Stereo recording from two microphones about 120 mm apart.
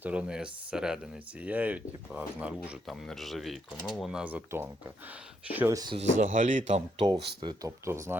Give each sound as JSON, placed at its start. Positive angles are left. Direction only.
{"t": 0.0, "sound": "speech", "side_deg": -10}
{"t": 2.8, "sound": "speech", "side_deg": 0}
{"t": 5.7, "sound": "speech", "side_deg": -35}
{"t": 6.0, "sound": "speech", "side_deg": -90}
{"t": 7.1, "sound": "speech", "side_deg": -35}
{"t": 7.9, "sound": "speech", "side_deg": -25}